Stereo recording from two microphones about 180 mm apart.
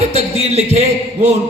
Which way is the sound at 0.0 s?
35° right (ahead or behind).